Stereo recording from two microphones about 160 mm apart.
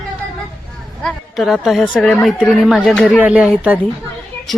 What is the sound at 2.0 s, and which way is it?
Speech, 5° left (ahead or behind).